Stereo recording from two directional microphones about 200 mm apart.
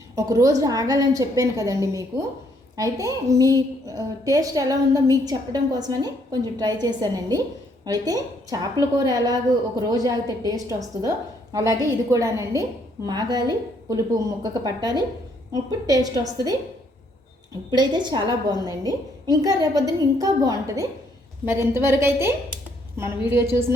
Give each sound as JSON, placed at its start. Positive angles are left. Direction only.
{"t": 0.3, "sound": "a woman's voice", "side_deg": -15}
{"t": 14.4, "sound": "a woman's voice", "side_deg": -20}
{"t": 17.7, "sound": "a woman's voice", "side_deg": -20}